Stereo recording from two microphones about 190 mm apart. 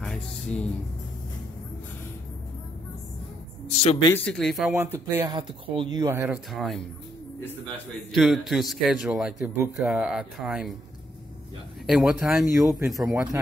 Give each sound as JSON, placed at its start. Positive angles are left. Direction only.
{"t": 0.0, "sound": "a sound", "side_deg": 5}
{"t": 3.6, "sound": "speech", "side_deg": 30}
{"t": 4.1, "sound": "a man's voice", "side_deg": 5}
{"t": 4.9, "sound": "speech", "side_deg": -10}
{"t": 5.3, "sound": "a man's voice", "side_deg": -25}
{"t": 8.2, "sound": "a man's voice", "side_deg": 0}
{"t": 11.8, "sound": "a man's voice", "side_deg": 0}
{"t": 12.9, "sound": "speech", "side_deg": -15}